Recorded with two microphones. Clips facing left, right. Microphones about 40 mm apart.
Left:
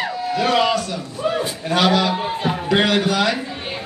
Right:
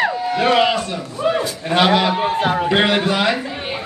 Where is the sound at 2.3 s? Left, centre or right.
Right.